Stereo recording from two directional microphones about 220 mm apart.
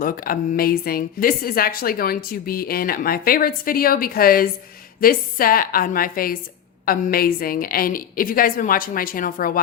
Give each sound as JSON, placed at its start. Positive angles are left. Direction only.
{"t": 0.0, "sound": "a woman's voice", "side_deg": 40}